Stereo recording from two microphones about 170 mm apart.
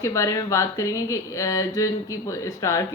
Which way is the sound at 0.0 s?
20° left (ahead or behind).